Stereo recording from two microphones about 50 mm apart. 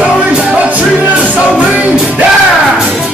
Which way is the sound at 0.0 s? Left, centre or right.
Right.